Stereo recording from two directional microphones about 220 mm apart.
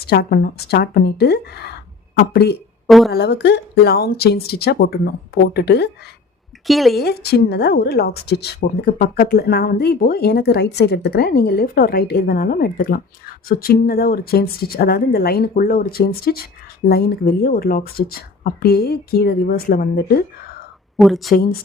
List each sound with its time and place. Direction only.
0.0 s speech: 45° left (ahead or behind)
2.8 s speech: centre (ahead or behind)
3.1 s speech: 50° left (ahead or behind)
6.7 s speech: centre (ahead or behind)
7.0 s speech: 45° left (ahead or behind)
20.9 s speech: centre (ahead or behind)
21.3 s speech: 45° left (ahead or behind)